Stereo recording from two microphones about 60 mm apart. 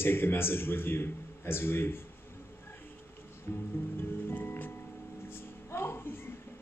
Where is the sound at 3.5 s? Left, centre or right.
Left.